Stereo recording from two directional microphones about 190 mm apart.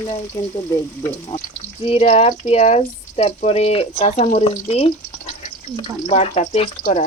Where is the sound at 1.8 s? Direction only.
30° left (ahead or behind).